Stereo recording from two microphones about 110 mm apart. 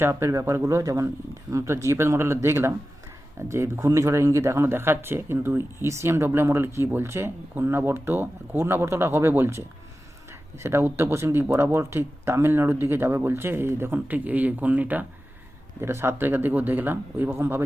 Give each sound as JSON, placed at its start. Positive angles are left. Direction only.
{"t": 0.0, "sound": "speech", "side_deg": -25}